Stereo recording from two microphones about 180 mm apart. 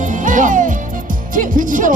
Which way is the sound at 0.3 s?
45° right (ahead or behind).